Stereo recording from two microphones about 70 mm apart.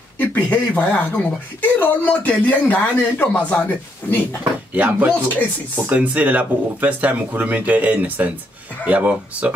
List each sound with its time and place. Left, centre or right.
0.2 s speech: left
4.7 s speech: right